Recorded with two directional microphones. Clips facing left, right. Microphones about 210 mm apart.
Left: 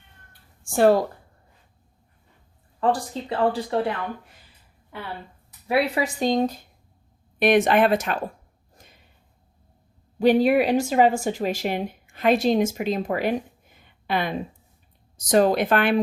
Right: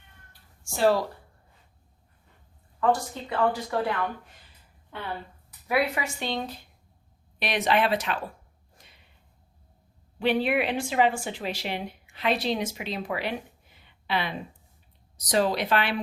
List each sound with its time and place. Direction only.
0.6 s speech: 50° left (ahead or behind)
2.8 s speech: 30° left (ahead or behind)
5.6 s speech: 30° left (ahead or behind); by 8.2 s 45° left (ahead or behind)
8.7 s a sound: 45° left (ahead or behind)
10.2 s speech: 40° left (ahead or behind)